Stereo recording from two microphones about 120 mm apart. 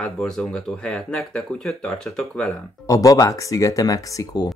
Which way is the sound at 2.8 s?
30° left (ahead or behind).